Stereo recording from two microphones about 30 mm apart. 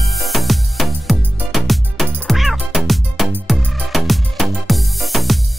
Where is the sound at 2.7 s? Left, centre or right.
Centre.